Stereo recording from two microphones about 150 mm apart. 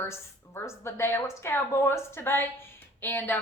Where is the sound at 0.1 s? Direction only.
15° left (ahead or behind).